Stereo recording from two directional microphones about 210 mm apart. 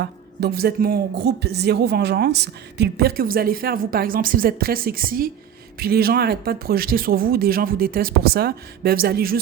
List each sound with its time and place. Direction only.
0.0 s speech: 50° right (ahead or behind)